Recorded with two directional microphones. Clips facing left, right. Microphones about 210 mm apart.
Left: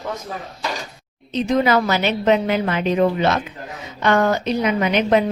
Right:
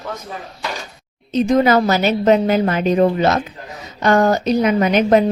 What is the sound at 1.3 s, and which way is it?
A woman's voice, 45° right (ahead or behind).